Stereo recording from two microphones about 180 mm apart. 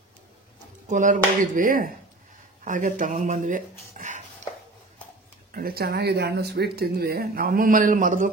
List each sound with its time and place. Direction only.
0.8 s speech: 45° right (ahead or behind)
5.5 s speech: 55° right (ahead or behind)